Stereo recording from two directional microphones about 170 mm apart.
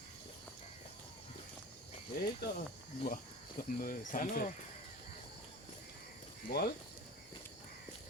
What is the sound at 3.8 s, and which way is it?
Speech, 55° left (ahead or behind).